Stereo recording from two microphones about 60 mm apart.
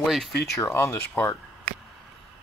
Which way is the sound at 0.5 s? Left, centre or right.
Left.